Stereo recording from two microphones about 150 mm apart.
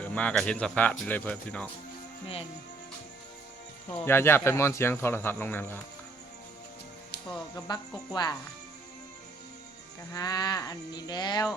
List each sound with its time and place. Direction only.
0.0 s speech: 10° left (ahead or behind)
2.2 s speech: 40° left (ahead or behind)
3.8 s speech: 15° left (ahead or behind)
7.5 s speech: 25° left (ahead or behind)
10.1 s speech: 25° left (ahead or behind)